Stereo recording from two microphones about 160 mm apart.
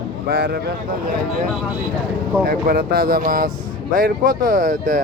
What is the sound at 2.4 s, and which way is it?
Speech, 70° right (ahead or behind).